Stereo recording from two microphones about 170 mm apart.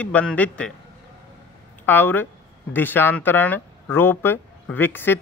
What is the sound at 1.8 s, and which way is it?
Speech, 10° left (ahead or behind).